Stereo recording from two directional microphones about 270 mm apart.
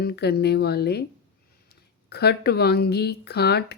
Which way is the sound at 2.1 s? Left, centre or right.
Left.